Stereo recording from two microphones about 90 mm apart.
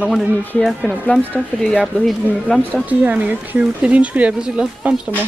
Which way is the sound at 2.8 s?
15° right (ahead or behind).